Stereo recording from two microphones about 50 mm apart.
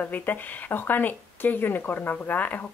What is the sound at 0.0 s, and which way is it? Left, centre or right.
Speech, left.